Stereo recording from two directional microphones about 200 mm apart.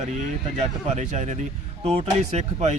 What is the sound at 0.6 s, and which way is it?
Speech, 35° right (ahead or behind).